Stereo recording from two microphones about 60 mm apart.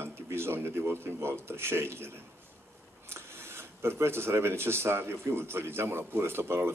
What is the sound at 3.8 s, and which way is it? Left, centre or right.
Speech, right.